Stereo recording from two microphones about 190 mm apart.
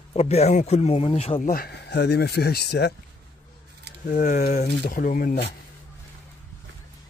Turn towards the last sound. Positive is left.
turn(degrees=45)  # may be behind; listen again after turning